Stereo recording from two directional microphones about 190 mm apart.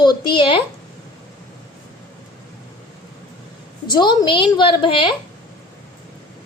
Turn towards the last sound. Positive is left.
turn(degrees=25)  # may be behind; listen again after turning